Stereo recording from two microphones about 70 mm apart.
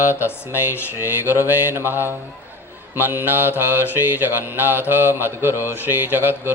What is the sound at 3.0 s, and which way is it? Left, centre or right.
Speech, right.